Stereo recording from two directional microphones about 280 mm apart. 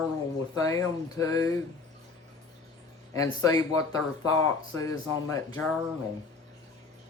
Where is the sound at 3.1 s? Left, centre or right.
Centre.